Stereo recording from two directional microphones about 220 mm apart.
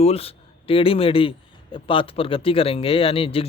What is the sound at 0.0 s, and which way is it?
Speech, 25° left (ahead or behind).